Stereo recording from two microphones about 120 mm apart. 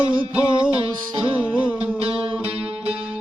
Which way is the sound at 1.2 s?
10° right (ahead or behind).